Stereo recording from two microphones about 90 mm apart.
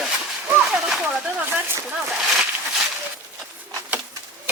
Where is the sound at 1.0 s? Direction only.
20° right (ahead or behind).